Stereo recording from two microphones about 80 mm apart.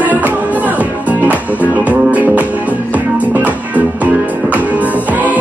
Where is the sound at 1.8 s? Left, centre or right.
Centre.